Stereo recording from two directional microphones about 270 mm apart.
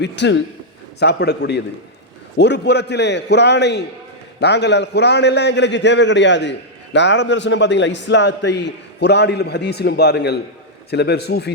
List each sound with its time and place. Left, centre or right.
0.0 s a man's voice: left